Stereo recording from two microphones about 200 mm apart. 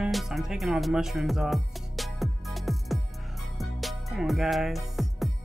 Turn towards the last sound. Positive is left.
turn(degrees=0)  # may be behind; listen again after turning